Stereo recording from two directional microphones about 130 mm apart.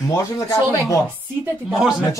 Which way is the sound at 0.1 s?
25° left (ahead or behind).